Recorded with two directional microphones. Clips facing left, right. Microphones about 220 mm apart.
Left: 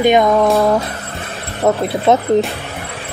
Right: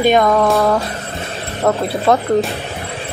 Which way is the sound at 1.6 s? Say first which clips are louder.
Left 1 dB; 20° left (ahead or behind).